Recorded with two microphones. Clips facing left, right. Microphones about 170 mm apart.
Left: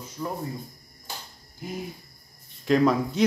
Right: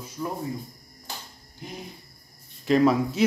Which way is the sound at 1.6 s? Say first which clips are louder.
Left 4 dB; 5° left (ahead or behind).